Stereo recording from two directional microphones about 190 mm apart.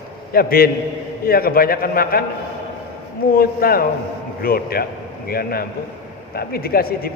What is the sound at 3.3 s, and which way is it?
A man's voice, 50° left (ahead or behind).